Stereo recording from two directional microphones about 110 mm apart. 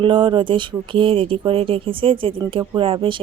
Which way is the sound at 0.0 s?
50° right (ahead or behind).